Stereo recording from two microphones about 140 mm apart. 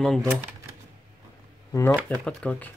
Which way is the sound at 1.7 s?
20° left (ahead or behind).